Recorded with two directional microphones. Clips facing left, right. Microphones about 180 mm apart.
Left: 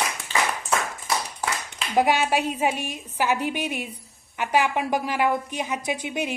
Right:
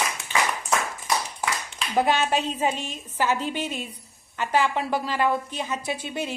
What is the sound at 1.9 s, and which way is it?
A woman's voice, 10° left (ahead or behind).